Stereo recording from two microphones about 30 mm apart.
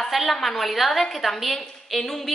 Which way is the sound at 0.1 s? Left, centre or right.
Centre.